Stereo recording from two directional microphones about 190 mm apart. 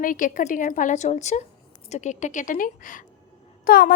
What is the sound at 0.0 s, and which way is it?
A woman's voice, 45° left (ahead or behind).